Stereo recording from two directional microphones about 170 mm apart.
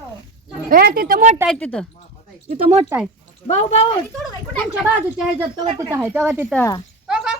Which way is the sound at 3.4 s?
40° left (ahead or behind).